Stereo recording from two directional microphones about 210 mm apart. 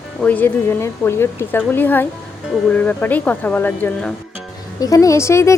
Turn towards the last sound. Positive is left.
turn(degrees=15)  # may be behind; listen again after turning